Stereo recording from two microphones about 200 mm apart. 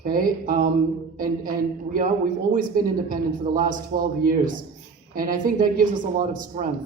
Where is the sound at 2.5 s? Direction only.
40° right (ahead or behind).